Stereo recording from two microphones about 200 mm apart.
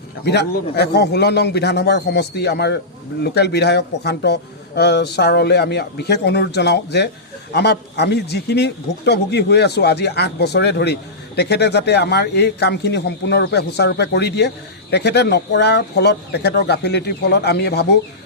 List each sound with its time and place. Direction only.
0.3 s a man's voice: 55° left (ahead or behind)